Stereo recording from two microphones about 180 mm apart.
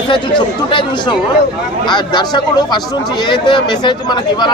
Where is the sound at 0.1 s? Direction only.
25° left (ahead or behind).